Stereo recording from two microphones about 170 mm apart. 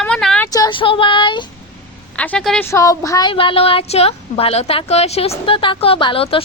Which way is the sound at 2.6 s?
15° left (ahead or behind).